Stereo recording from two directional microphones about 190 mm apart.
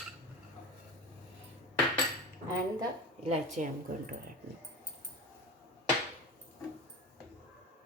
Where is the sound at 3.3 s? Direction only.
40° right (ahead or behind).